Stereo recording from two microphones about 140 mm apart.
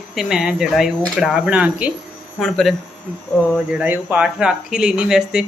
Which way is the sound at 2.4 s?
Centre (ahead or behind).